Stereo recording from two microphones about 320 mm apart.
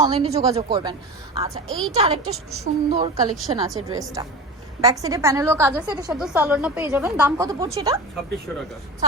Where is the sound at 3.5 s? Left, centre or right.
Centre.